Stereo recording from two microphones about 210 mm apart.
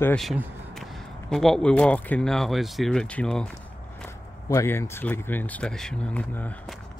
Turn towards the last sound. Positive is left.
turn(degrees=5)  # may be behind; listen again after turning